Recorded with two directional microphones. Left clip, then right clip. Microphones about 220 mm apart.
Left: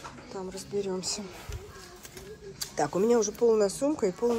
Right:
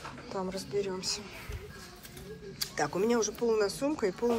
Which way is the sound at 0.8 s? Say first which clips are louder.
Left 2 dB; 20° left (ahead or behind).